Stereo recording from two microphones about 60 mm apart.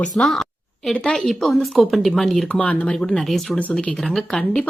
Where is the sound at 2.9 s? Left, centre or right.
Centre.